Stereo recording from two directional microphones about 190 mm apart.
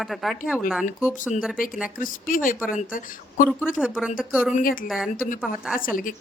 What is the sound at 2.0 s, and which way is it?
A woman's voice, 45° left (ahead or behind).